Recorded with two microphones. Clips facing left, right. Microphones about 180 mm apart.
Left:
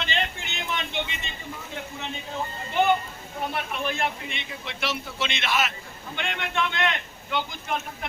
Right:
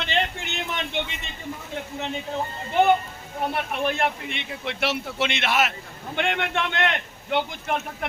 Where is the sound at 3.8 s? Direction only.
60° right (ahead or behind).